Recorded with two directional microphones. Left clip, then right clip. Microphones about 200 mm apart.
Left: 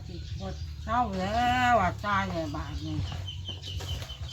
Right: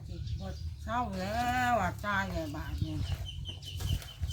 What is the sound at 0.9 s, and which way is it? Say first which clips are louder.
Speech: left 6 dB; 10° right (ahead or behind).